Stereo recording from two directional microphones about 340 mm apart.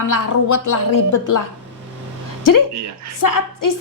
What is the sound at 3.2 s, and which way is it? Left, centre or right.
Speech, left.